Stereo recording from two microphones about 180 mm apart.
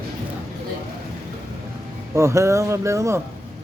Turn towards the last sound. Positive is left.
turn(degrees=-15)  # may be behind; listen again after turning